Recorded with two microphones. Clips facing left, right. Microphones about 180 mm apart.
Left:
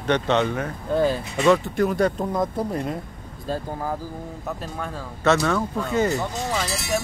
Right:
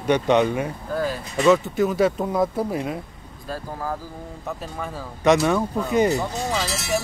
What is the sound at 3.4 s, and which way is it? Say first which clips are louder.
Speech: left 2 dB; 25° left (ahead or behind).